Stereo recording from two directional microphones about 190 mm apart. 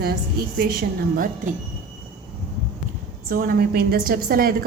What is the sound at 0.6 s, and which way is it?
Speech, 50° right (ahead or behind).